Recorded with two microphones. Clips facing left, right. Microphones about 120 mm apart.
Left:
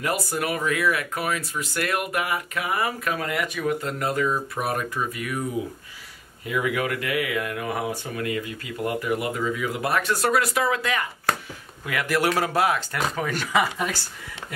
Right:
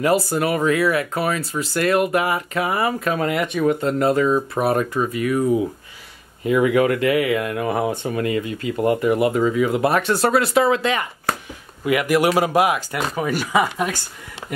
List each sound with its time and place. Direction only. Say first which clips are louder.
0.0 s speech: right 8 dB; 30° right (ahead or behind)
6.4 s speech: right 9 dB; 35° right (ahead or behind)
11.8 s speech: right 6 dB; 15° right (ahead or behind)